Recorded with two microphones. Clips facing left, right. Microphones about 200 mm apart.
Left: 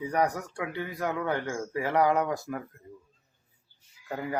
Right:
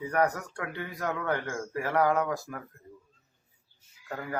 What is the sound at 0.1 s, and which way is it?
Speech, 15° left (ahead or behind).